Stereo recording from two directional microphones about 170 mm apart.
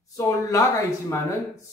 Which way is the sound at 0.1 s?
20° left (ahead or behind).